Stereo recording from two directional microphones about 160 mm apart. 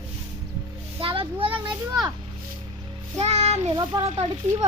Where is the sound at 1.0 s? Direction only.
35° right (ahead or behind).